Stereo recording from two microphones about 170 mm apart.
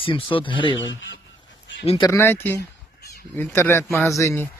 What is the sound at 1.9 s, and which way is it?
Speech, 30° left (ahead or behind).